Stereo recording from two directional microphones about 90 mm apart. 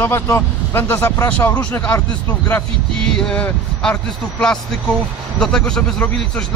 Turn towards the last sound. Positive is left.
turn(degrees=10)  # may be behind; listen again after turning